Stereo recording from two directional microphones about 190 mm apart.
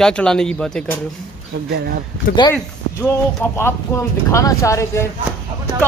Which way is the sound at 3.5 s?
15° left (ahead or behind).